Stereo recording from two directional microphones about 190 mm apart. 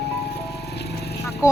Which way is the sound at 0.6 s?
60° left (ahead or behind).